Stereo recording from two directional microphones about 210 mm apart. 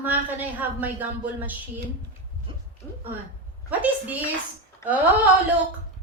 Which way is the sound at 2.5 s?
25° right (ahead or behind).